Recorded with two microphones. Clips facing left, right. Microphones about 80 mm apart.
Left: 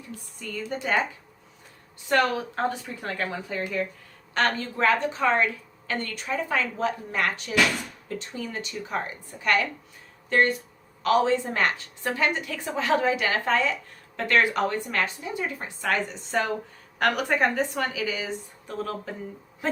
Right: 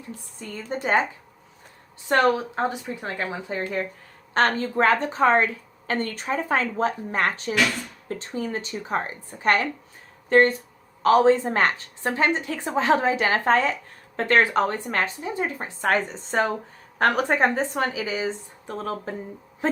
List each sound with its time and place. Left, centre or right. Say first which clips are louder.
0.3 s a woman's voice: right 1 dB; right
2.0 s a woman's voice: right 3 dB; right
2.6 s a woman's voice: right 2 dB; centre
3.5 s a woman's voice: right 1 dB; right